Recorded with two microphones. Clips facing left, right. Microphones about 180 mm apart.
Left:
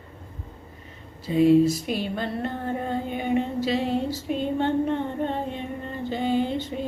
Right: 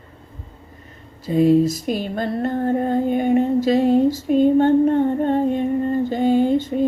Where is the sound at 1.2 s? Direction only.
40° right (ahead or behind).